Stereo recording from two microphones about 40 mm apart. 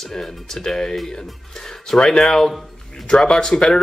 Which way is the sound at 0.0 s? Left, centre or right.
Centre.